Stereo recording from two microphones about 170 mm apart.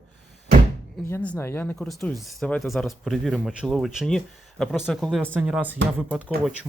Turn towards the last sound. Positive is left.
turn(degrees=-10)  # may be behind; listen again after turning